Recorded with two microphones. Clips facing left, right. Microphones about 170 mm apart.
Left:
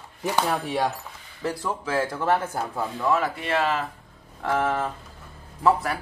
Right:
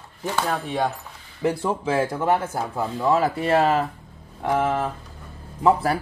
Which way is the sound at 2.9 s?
25° right (ahead or behind).